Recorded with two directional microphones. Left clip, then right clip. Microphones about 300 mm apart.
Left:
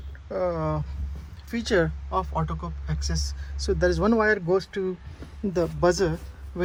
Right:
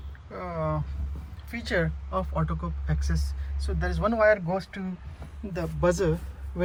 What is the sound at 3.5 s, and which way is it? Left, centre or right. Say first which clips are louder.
Speech: left 10 dB; centre.